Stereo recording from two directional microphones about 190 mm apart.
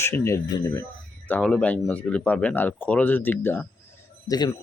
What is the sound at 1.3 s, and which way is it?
Speech, 5° left (ahead or behind).